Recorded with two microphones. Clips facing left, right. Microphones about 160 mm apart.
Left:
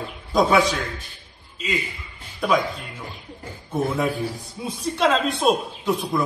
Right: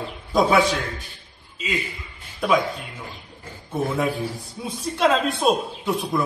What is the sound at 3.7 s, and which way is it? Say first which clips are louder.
Speech: even; centre (ahead or behind).